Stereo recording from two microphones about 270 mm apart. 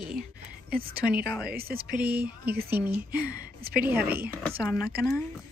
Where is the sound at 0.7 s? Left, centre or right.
Right.